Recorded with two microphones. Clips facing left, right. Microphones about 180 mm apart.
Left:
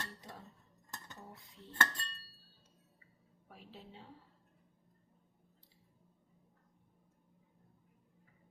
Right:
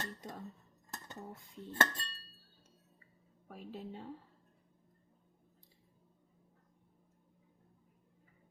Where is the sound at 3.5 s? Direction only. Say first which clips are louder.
Right 8 dB; 50° right (ahead or behind).